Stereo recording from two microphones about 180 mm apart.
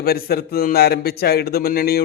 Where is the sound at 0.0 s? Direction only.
60° left (ahead or behind).